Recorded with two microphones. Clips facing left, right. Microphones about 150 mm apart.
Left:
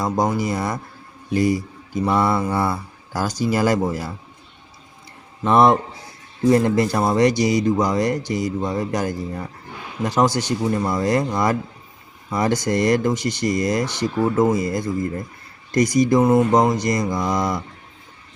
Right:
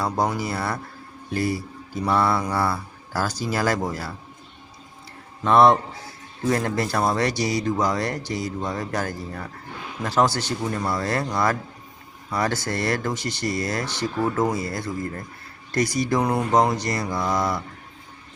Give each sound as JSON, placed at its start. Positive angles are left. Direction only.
{"t": 0.0, "sound": "a man's voice", "side_deg": 15}
{"t": 5.5, "sound": "a man's voice", "side_deg": 15}